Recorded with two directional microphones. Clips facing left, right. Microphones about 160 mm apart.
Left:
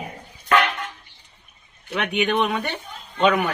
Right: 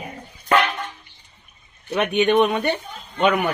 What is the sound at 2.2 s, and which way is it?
Speech, 20° right (ahead or behind).